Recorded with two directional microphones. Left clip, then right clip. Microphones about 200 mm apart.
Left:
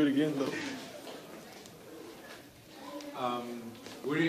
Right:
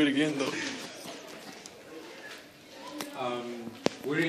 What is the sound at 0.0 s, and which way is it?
Speech, 20° left (ahead or behind).